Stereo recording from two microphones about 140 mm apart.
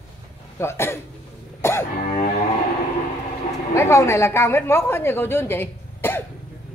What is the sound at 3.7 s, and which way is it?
A woman's voice, 20° left (ahead or behind).